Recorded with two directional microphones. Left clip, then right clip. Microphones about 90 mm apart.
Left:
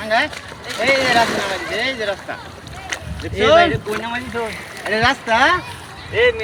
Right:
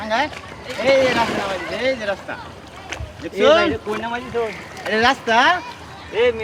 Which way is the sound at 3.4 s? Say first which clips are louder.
Left 2 dB; 90° right.